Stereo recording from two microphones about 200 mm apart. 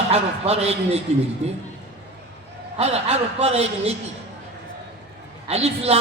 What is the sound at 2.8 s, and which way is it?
A man's voice, 30° right (ahead or behind).